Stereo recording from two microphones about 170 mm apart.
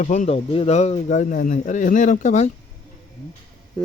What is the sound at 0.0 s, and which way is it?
Speech, 45° left (ahead or behind).